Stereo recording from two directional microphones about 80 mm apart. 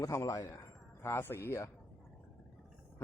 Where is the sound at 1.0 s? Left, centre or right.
Left.